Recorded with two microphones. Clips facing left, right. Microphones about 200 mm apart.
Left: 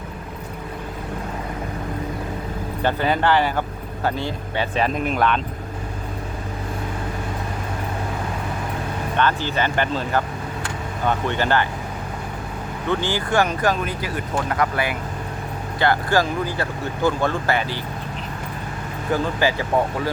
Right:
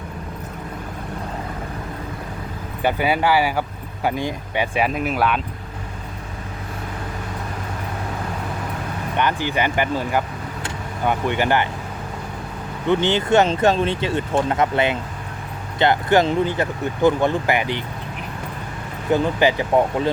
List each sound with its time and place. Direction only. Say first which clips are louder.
2.8 s speech: right 1 dB; 10° right (ahead or behind)
9.1 s speech: right 1 dB; 15° right (ahead or behind)
12.9 s speech: right 5 dB; 20° right (ahead or behind)
19.1 s speech: right 4 dB; 20° right (ahead or behind)